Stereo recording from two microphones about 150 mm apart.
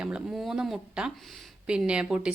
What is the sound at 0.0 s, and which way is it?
A woman's voice, 5° right (ahead or behind).